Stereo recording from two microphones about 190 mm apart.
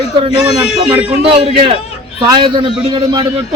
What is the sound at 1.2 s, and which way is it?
A man's voice, 30° right (ahead or behind).